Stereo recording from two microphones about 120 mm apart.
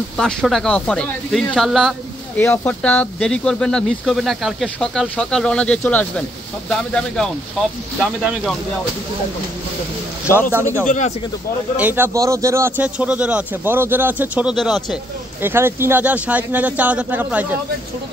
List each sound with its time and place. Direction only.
0.2 s speech: 5° left (ahead or behind)
2.3 s speech: 15° left (ahead or behind); by 8.5 s 5° right (ahead or behind)
10.5 s speech: 25° right (ahead or behind)
10.9 s speech: 85° left
11.7 s a man's voice: 15° right (ahead or behind)
14.5 s speech: centre (ahead or behind)
15.4 s a man's voice: 20° right (ahead or behind)